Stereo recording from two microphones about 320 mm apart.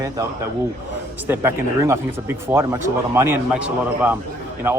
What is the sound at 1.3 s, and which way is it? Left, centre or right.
Speech, centre.